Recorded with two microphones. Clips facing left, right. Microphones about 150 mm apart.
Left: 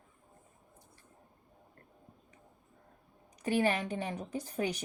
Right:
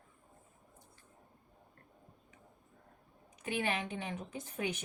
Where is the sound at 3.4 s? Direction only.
40° left (ahead or behind).